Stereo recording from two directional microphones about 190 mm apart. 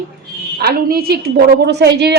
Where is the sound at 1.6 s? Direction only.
60° right (ahead or behind).